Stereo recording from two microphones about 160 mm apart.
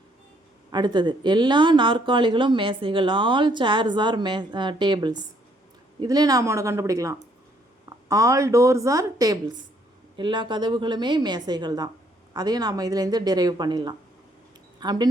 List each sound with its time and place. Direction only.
0.7 s speech: 30° right (ahead or behind)